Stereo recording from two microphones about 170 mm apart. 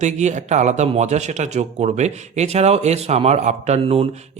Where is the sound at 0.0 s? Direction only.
45° right (ahead or behind).